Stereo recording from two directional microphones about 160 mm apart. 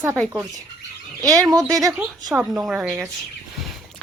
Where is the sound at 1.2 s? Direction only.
20° right (ahead or behind).